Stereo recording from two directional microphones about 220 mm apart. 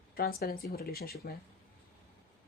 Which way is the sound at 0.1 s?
45° left (ahead or behind).